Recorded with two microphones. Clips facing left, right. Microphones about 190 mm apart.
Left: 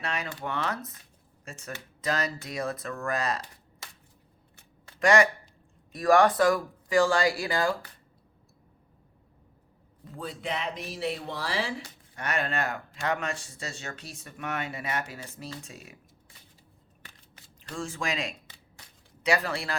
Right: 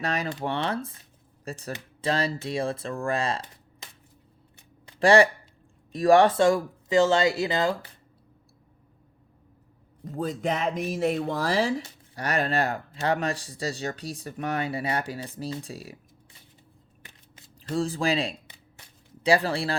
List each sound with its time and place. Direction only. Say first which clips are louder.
0.0 s speech: right 5 dB; 35° right (ahead or behind)
4.9 s speech: right 4 dB; 30° right (ahead or behind)
10.0 s speech: right 8 dB; 45° right (ahead or behind)
17.7 s speech: right 8 dB; 35° right (ahead or behind)